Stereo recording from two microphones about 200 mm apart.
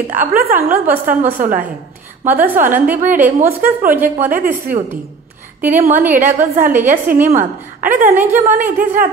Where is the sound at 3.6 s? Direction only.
45° right (ahead or behind).